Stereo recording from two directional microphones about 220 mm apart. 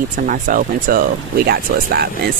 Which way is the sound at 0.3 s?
40° right (ahead or behind).